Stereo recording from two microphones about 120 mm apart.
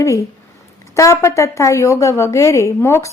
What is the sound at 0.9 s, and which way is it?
A woman's voice, 25° left (ahead or behind).